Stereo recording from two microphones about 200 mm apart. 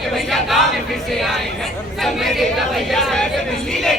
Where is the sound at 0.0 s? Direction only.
Centre (ahead or behind).